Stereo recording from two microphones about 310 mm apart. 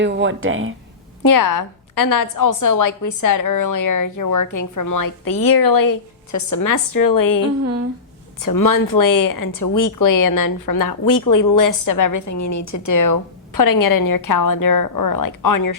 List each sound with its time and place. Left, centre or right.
0.0 s speech: right
1.2 s a woman's voice: left
7.6 s speech: right
8.4 s speech: left